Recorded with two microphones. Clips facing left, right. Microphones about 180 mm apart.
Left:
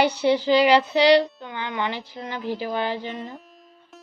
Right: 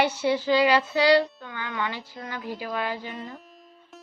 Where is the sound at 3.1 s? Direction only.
Centre (ahead or behind).